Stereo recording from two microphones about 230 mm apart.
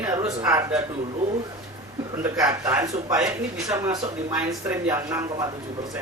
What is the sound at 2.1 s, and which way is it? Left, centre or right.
A man's voice, centre.